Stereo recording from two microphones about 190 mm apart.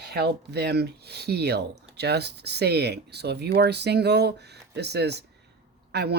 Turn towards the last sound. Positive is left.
turn(degrees=-60)  # may be behind; listen again after turning